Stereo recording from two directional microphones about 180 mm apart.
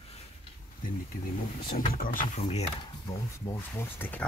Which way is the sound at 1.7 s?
50° left (ahead or behind).